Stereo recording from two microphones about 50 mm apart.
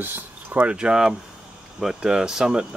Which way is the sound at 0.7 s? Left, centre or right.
Centre.